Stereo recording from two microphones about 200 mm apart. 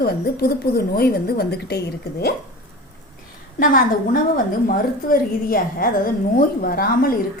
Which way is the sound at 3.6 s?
45° left (ahead or behind).